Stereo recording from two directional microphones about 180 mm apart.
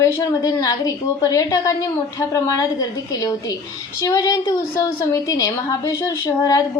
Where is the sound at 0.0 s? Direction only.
20° left (ahead or behind).